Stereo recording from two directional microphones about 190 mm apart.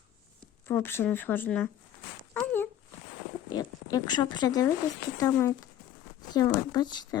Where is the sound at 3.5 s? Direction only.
20° left (ahead or behind).